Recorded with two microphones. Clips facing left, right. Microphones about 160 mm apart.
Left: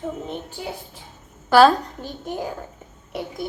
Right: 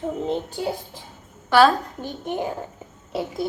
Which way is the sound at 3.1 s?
30° right (ahead or behind).